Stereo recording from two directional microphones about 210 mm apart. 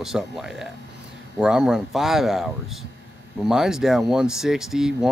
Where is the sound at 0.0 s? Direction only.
Centre (ahead or behind).